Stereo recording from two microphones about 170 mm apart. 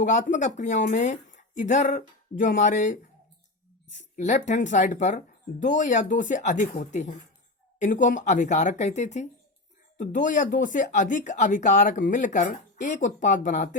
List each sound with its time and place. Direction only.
0.0 s speech: 45° left (ahead or behind)
4.1 s speech: 45° left (ahead or behind)
7.8 s speech: 50° left (ahead or behind)